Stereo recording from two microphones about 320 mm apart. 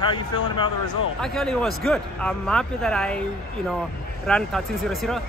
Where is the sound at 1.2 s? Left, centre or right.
Centre.